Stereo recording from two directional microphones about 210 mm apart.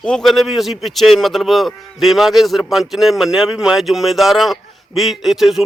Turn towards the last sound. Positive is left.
turn(degrees=0)  # may be behind; listen again after turning